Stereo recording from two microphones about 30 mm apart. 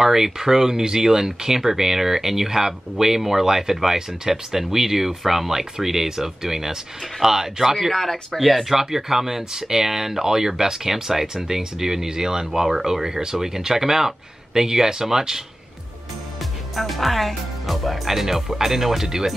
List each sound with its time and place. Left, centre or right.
0.0 s speech: centre
7.9 s speech: centre
8.4 s speech: centre
16.3 s speech: centre